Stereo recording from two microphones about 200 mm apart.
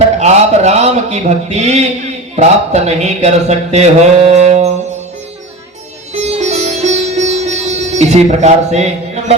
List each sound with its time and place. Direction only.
0.2 s a man's voice: 35° right (ahead or behind)
6.1 s sitar: 30° right (ahead or behind)